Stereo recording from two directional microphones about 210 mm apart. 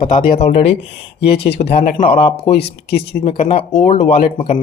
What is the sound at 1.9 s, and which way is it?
Speech, 40° left (ahead or behind).